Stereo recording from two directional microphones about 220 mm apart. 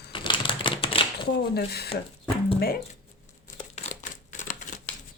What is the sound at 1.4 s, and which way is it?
Speech, 45° left (ahead or behind).